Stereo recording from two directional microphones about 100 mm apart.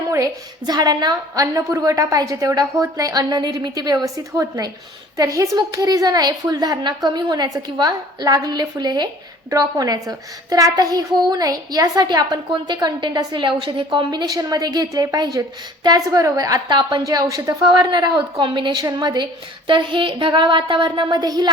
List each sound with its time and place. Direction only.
0.1 s a child's voice: 40° right (ahead or behind)
1.5 s a child's voice: 30° right (ahead or behind)
17.7 s a woman's voice: 45° right (ahead or behind)